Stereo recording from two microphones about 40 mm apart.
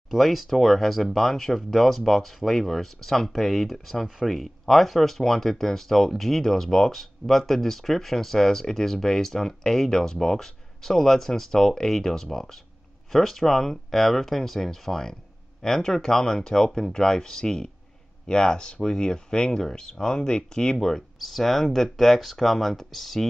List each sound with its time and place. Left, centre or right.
0.1 s speech: centre; by 18.9 s left
18.9 s speech: centre
20.7 s speech: centre